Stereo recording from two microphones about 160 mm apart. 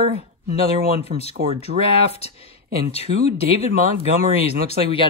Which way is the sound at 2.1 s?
40° left (ahead or behind).